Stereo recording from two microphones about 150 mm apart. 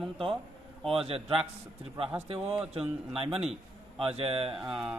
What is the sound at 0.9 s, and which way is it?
Speech, 40° right (ahead or behind).